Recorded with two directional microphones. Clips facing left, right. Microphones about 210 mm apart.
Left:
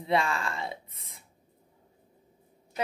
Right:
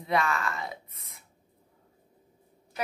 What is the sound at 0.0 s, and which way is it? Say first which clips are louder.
Speech: even; 30° left (ahead or behind).